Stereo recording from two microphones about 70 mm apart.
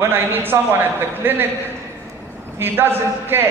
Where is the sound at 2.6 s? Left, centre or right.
Right.